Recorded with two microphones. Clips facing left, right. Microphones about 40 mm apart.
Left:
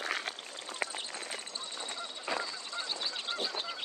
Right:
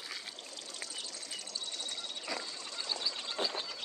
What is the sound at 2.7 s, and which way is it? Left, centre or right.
Goose, left.